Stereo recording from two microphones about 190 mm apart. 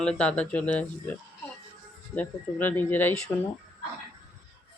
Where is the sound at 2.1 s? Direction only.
10° left (ahead or behind).